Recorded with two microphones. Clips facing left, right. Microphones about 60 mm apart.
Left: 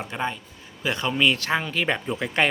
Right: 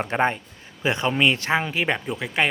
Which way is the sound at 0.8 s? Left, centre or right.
Right.